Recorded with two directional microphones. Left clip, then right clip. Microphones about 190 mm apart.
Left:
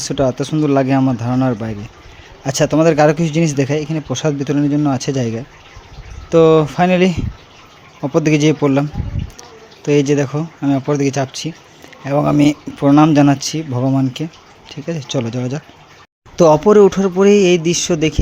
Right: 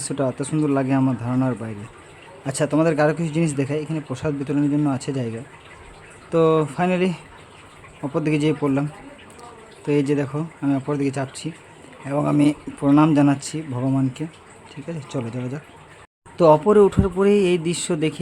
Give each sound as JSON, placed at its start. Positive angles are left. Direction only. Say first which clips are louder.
{"t": 0.0, "sound": "speech", "louder": "left 7 dB", "side_deg": 20}